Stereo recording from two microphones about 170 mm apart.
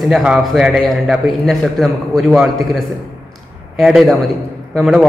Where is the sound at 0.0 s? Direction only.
5° right (ahead or behind).